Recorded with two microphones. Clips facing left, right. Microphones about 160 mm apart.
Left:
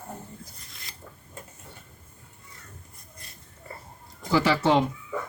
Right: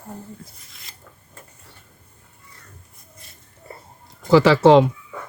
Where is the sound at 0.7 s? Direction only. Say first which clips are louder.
Left 1 dB; centre (ahead or behind).